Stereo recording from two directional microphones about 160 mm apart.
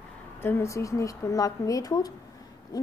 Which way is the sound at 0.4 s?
15° left (ahead or behind).